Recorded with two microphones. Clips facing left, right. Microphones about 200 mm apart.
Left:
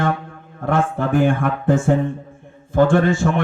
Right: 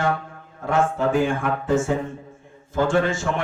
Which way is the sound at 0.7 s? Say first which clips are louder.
Left 1 dB; 60° left (ahead or behind).